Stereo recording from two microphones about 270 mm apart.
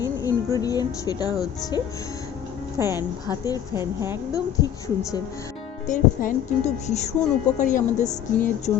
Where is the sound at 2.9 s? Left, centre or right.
Centre.